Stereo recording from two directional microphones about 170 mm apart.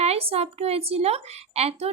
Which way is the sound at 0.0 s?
35° right (ahead or behind).